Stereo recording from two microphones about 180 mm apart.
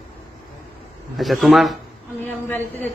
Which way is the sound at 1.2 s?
Centre (ahead or behind).